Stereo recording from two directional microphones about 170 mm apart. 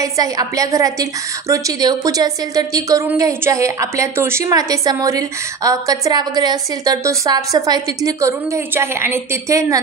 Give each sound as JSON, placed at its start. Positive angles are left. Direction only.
{"t": 0.0, "sound": "a woman's voice", "side_deg": -20}